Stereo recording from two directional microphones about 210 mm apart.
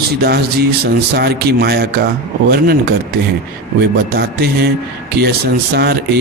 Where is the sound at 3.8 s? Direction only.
50° right (ahead or behind).